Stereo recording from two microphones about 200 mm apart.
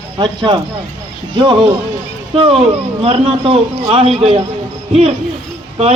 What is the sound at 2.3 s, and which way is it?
A woman's voice, 30° right (ahead or behind).